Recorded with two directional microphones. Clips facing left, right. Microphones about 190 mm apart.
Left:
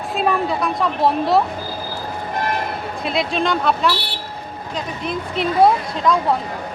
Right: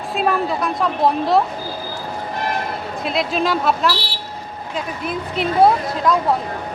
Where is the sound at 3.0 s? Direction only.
Centre (ahead or behind).